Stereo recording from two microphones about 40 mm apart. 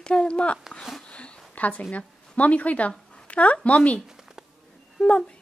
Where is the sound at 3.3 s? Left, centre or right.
Left.